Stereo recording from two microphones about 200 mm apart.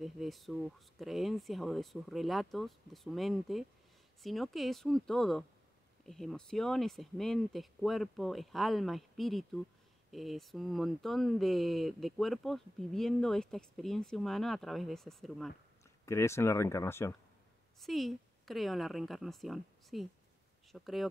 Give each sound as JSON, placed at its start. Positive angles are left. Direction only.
{"t": 0.0, "sound": "speech", "side_deg": 0}
{"t": 16.1, "sound": "speech", "side_deg": 15}
{"t": 17.7, "sound": "a woman's voice", "side_deg": 0}